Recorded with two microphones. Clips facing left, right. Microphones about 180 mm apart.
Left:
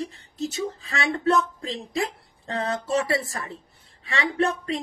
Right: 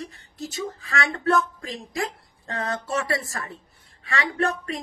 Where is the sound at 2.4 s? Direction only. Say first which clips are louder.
Left 2 dB; 30° left (ahead or behind).